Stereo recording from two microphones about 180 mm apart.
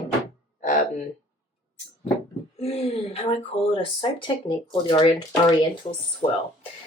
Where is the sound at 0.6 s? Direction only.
45° left (ahead or behind).